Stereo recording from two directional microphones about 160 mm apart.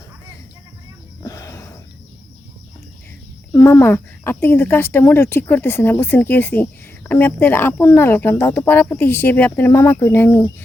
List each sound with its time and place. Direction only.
1.2 s wild animals: 20° left (ahead or behind)
3.5 s speech: 15° left (ahead or behind)